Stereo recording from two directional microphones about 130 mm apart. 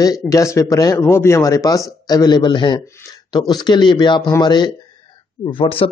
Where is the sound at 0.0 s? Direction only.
25° left (ahead or behind).